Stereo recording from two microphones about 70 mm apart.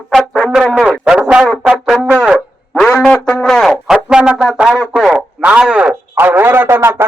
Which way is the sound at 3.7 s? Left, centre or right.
Centre.